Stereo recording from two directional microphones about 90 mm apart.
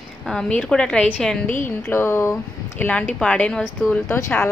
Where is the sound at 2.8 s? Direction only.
15° left (ahead or behind).